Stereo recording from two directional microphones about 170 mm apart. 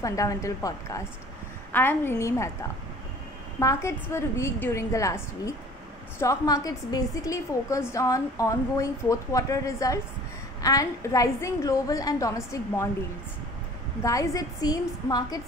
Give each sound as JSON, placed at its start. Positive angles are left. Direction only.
{"t": 0.0, "sound": "a woman's voice", "side_deg": 20}
{"t": 3.5, "sound": "a woman's voice", "side_deg": 15}
{"t": 14.0, "sound": "a woman's voice", "side_deg": 20}